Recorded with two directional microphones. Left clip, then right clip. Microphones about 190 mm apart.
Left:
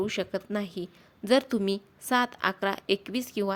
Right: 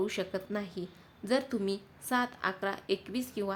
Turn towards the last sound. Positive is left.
turn(degrees=40)  # may be behind; listen again after turning